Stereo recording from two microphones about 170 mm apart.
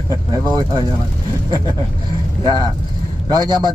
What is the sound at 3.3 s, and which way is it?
Speech, 25° right (ahead or behind).